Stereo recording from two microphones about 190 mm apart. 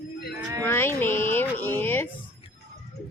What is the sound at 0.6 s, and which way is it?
Music, 10° left (ahead or behind).